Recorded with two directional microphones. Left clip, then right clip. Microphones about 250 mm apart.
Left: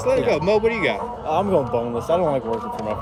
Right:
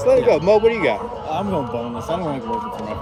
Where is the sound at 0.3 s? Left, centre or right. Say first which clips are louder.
Right 4 dB; centre.